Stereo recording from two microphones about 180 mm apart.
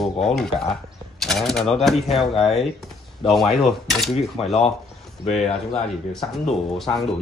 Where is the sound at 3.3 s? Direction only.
Centre (ahead or behind).